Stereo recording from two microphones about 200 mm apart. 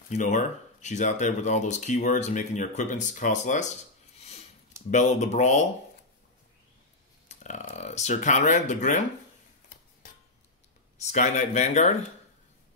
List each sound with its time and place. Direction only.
0.1 s speech: 40° left (ahead or behind)
4.2 s sniff: 30° left (ahead or behind)
4.9 s speech: 35° left (ahead or behind)
7.2 s speech: 35° left (ahead or behind)
11.1 s speech: 35° left (ahead or behind)